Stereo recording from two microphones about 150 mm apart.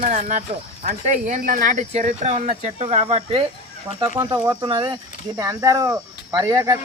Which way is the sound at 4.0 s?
30° right (ahead or behind).